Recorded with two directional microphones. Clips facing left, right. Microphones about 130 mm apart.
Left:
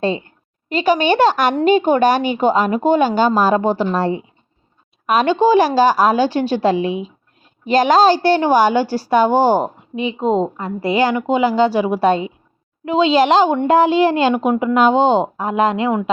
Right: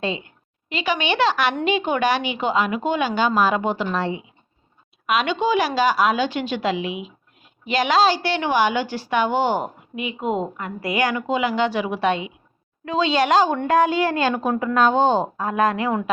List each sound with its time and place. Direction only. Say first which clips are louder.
0.0 s a woman's voice: left 7 dB; 40° left (ahead or behind)
12.8 s speech: left 6 dB; 25° left (ahead or behind)